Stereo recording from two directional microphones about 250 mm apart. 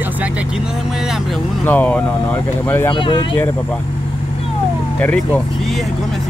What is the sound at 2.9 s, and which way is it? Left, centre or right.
Speech, centre.